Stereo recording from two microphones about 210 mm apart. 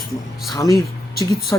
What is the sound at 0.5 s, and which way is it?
Speech, 15° left (ahead or behind).